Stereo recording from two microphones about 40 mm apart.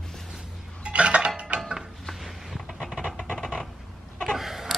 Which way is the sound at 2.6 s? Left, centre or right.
Centre.